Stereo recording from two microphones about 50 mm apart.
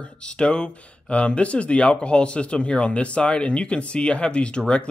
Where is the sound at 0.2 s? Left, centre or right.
Centre.